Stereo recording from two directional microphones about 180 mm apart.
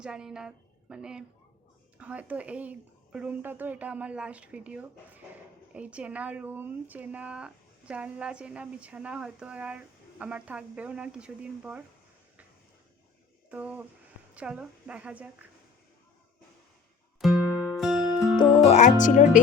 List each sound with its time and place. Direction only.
0.0 s a woman's voice: 5° right (ahead or behind)
13.5 s speech: 10° right (ahead or behind)
17.2 s music: centre (ahead or behind)
18.3 s music: 30° left (ahead or behind); by 19.4 s 45° left (ahead or behind)